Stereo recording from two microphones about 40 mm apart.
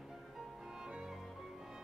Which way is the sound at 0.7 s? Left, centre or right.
Centre.